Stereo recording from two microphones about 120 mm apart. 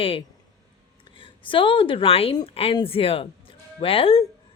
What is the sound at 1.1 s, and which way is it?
Speech, 45° left (ahead or behind).